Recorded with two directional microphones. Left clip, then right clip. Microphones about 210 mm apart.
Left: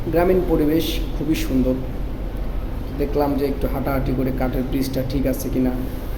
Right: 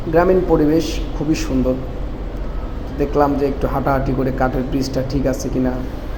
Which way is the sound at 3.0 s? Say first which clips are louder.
Right 4 dB; 5° right (ahead or behind).